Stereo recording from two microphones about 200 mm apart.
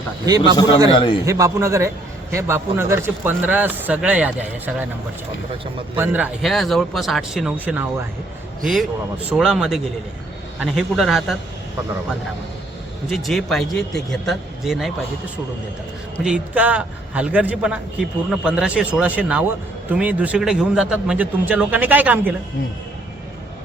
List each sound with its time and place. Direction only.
0.3 s a man's voice: 20° right (ahead or behind)
0.9 s a man's voice: 25° left (ahead or behind)
1.2 s speech: 15° right (ahead or behind)
6.0 s speech: 10° right (ahead or behind)
13.1 s speech: centre (ahead or behind)
16.2 s speech: 5° right (ahead or behind)